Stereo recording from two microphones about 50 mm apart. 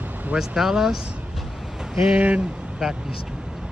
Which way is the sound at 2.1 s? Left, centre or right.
Right.